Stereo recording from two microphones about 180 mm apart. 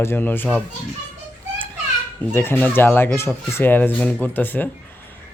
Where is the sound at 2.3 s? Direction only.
10° left (ahead or behind).